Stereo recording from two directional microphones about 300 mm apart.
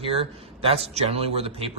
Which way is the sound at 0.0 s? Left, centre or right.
Centre.